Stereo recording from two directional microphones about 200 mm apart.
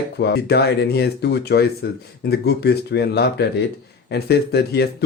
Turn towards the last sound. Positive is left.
turn(degrees=55)  # may be behind; listen again after turning